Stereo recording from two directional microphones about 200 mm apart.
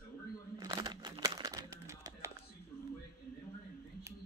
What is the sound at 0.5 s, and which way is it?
Crumpling, 20° right (ahead or behind).